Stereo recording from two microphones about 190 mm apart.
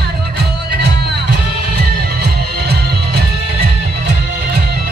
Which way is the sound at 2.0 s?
55° right (ahead or behind).